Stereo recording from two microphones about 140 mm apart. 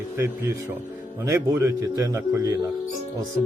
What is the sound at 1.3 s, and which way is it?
Speech, 20° right (ahead or behind).